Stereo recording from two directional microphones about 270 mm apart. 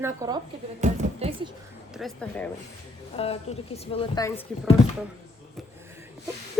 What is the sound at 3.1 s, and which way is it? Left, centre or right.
Speech, left.